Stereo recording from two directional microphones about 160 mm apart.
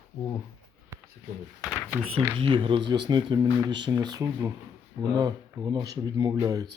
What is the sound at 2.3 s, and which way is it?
Speech, 35° right (ahead or behind).